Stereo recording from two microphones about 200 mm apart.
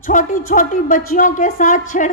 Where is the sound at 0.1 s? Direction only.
40° left (ahead or behind).